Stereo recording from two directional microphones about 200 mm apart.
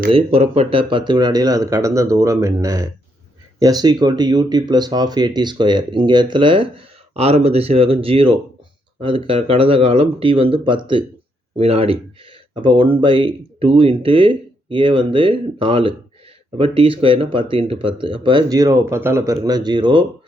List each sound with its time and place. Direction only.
0.1 s speech: 30° right (ahead or behind)